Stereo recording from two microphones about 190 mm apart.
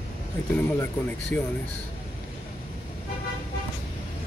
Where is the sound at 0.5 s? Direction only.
10° left (ahead or behind).